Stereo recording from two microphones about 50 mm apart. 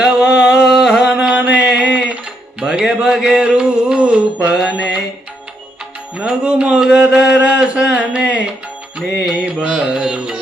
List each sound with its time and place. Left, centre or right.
0.0 s a sound: centre
4.4 s mantra: centre
6.1 s speech: centre
9.0 s music: centre